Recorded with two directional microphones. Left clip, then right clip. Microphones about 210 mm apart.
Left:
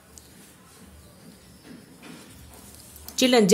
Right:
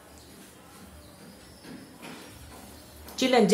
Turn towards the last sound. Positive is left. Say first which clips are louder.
# left 3 dB
turn(degrees=45)  # may be behind; listen again after turning